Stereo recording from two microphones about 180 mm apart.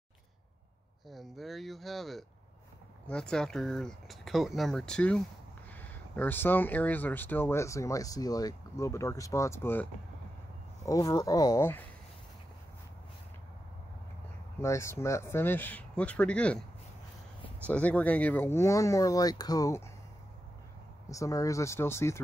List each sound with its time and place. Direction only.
1.0 s speech: centre (ahead or behind)
10.9 s speech: 20° left (ahead or behind)
14.6 s speech: 15° left (ahead or behind)
17.6 s speech: 10° left (ahead or behind)
21.1 s speech: 20° left (ahead or behind)